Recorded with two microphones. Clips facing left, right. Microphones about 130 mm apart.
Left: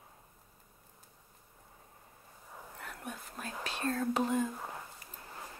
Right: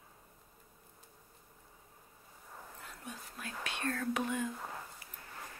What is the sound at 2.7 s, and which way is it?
Whispering, 60° left (ahead or behind).